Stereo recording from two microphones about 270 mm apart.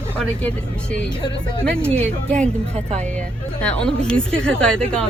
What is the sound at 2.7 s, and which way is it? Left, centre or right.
Speech, right.